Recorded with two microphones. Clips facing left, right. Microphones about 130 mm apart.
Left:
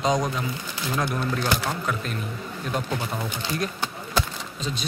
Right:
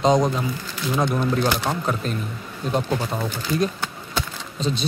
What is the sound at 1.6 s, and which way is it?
Speech, 35° right (ahead or behind).